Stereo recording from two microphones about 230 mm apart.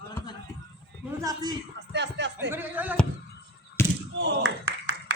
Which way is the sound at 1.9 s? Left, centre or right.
Right.